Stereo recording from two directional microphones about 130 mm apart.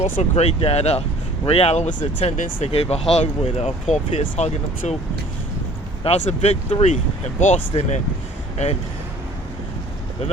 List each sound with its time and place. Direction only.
0.0 s speech: 55° left (ahead or behind)
6.1 s speech: 60° left (ahead or behind)
7.5 s speech: 55° left (ahead or behind)